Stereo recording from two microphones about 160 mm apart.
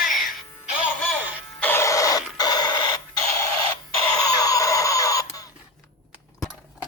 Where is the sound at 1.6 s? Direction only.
15° left (ahead or behind).